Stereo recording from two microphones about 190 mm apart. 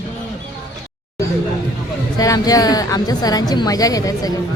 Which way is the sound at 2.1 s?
20° left (ahead or behind).